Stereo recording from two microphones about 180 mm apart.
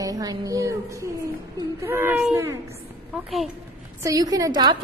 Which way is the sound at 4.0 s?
20° right (ahead or behind).